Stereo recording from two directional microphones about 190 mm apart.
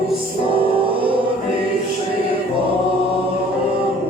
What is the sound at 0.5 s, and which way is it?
Music, 30° right (ahead or behind).